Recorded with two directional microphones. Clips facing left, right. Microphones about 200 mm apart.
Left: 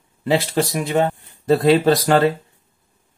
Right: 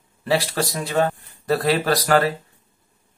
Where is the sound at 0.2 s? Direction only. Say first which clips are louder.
Left 3 dB; 20° left (ahead or behind).